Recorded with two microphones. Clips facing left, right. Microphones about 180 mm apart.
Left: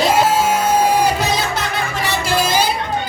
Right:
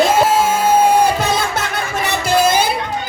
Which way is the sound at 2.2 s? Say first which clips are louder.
Right 4 dB; 55° right (ahead or behind).